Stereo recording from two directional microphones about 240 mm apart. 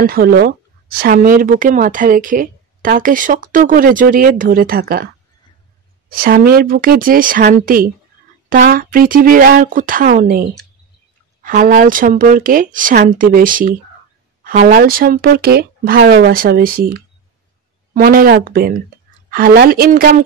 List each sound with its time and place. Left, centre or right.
0.0 s a woman's voice: right